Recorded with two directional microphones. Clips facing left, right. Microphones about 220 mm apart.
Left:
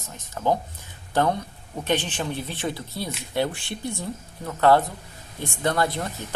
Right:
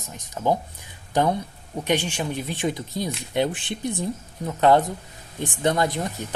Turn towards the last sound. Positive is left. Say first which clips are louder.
# right 2 dB
turn(degrees=-15)  # may be behind; listen again after turning